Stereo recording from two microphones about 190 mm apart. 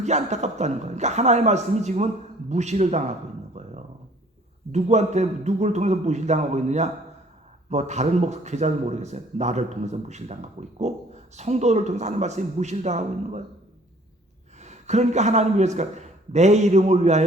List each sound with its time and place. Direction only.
0.0 s speech: 35° right (ahead or behind)
14.6 s a man's voice: 35° right (ahead or behind)